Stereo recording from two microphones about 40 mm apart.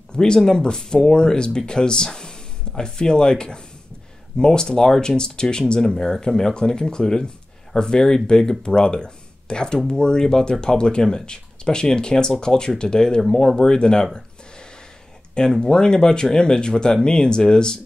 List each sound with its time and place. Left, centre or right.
0.1 s speech: centre
15.3 s speech: centre